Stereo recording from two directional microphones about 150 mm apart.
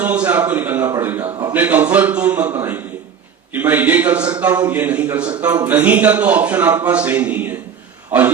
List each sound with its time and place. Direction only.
0.0 s a man's voice: 10° right (ahead or behind)